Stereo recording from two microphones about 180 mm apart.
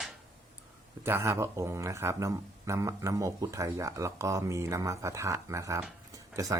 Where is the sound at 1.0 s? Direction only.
15° right (ahead or behind).